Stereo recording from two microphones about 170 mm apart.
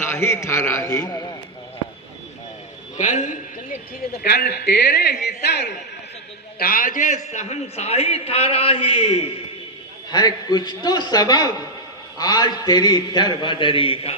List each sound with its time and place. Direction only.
0.0 s a man's voice: 15° left (ahead or behind)
3.0 s a man's voice: 45° left (ahead or behind)
4.2 s a man's voice: 70° left (ahead or behind)
6.6 s a man's voice: 55° left (ahead or behind); by 9.4 s 35° left (ahead or behind)
10.1 s a man's voice: 25° left (ahead or behind)